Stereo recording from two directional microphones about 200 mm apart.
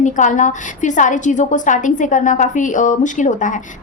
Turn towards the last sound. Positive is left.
turn(degrees=40)  # may be behind; listen again after turning